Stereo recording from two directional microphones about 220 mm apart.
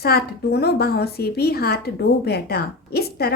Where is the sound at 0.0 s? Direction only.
45° left (ahead or behind).